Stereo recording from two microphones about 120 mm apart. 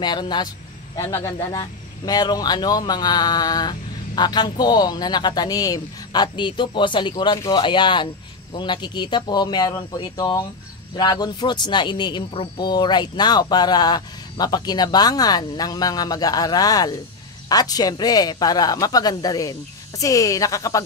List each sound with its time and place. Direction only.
0.0 s a man's voice: 35° left (ahead or behind)